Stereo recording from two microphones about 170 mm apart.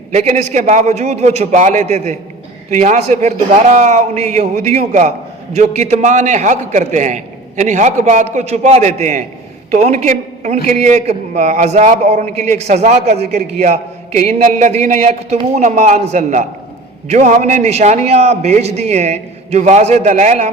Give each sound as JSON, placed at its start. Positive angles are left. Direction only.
{"t": 0.1, "sound": "a man's voice", "side_deg": -45}